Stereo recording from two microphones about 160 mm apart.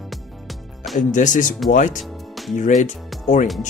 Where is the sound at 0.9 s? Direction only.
50° left (ahead or behind).